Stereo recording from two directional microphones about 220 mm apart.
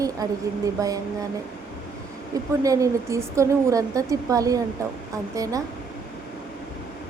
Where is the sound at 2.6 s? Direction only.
15° right (ahead or behind).